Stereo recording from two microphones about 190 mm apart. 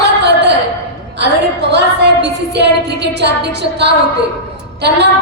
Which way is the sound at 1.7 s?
65° right (ahead or behind).